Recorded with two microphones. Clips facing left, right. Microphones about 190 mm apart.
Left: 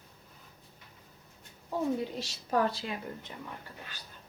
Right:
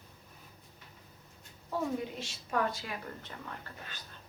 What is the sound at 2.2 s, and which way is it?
Speech, 30° left (ahead or behind).